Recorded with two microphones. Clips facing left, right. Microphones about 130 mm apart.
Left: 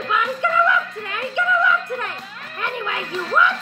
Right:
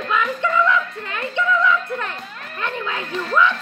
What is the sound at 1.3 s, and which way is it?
Music, 10° left (ahead or behind).